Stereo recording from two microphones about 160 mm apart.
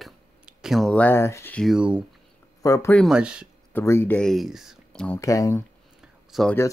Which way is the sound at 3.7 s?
15° left (ahead or behind).